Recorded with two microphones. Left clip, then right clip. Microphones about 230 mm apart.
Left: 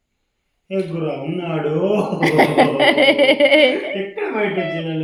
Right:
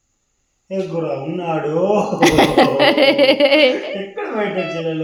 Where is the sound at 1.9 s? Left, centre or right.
Right.